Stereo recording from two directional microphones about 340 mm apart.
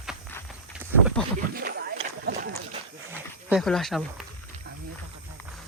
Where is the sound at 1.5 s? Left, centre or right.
Right.